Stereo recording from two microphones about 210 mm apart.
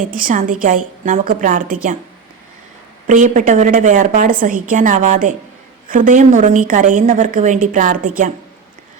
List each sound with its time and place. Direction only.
0.1 s a woman's voice: 40° right (ahead or behind)
3.1 s a woman's voice: 40° right (ahead or behind)